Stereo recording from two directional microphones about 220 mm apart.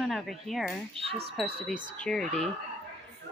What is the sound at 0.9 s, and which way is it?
Speech, 25° right (ahead or behind).